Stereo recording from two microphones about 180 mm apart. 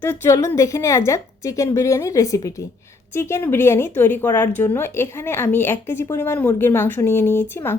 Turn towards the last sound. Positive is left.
turn(degrees=15)  # may be behind; listen again after turning